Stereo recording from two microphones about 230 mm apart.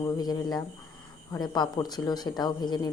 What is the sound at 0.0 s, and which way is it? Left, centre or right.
Speech, centre.